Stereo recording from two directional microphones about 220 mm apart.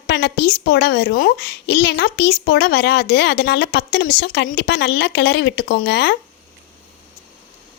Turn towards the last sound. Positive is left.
turn(degrees=50)  # may be behind; listen again after turning